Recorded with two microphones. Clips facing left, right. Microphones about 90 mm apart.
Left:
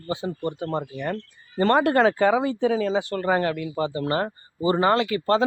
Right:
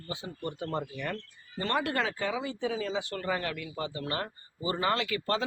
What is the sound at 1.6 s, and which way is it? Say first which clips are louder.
Speech: left 12 dB; 45° left (ahead or behind).